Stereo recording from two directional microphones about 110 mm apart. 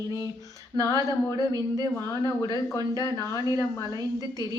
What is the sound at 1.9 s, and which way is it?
Speech, 25° left (ahead or behind).